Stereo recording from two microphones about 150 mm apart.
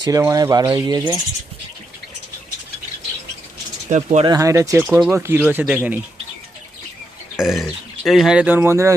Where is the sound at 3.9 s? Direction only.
50° right (ahead or behind).